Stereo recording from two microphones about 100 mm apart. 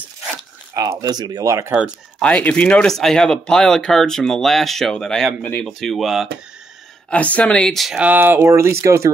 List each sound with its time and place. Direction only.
0.7 s speech: 40° right (ahead or behind)
2.1 s speech: 10° left (ahead or behind)
7.1 s speech: 15° left (ahead or behind)
8.0 s speech: 20° right (ahead or behind)